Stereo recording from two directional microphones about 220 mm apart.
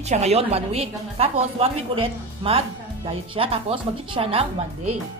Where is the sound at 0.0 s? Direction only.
30° right (ahead or behind).